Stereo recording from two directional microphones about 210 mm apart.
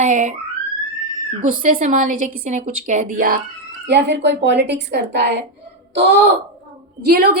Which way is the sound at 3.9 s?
55° right (ahead or behind).